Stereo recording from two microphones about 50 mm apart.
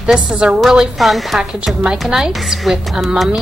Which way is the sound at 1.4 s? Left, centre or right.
Centre.